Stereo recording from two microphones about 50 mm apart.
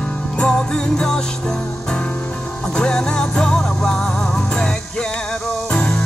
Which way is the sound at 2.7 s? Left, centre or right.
Centre.